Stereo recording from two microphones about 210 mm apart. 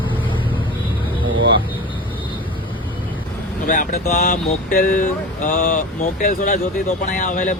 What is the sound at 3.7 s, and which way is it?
Speech, 40° left (ahead or behind).